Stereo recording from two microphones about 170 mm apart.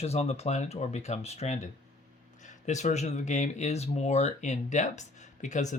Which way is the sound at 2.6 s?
45° left (ahead or behind).